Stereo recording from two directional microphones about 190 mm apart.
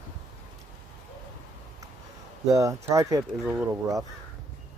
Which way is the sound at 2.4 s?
15° right (ahead or behind).